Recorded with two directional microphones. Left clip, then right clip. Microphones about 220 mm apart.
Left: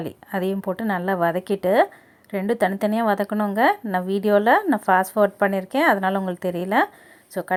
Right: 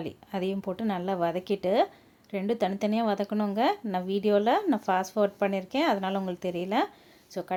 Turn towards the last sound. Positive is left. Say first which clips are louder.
# left 7 dB
turn(degrees=15)  # may be behind; listen again after turning